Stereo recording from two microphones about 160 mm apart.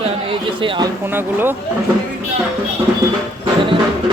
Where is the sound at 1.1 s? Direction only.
15° right (ahead or behind).